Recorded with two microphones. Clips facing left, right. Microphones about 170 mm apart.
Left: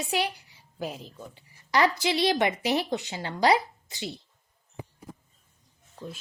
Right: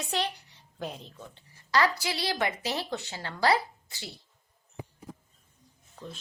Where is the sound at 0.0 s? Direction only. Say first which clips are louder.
Left 3 dB; 10° left (ahead or behind).